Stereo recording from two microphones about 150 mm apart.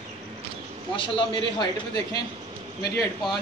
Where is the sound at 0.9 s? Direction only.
35° left (ahead or behind).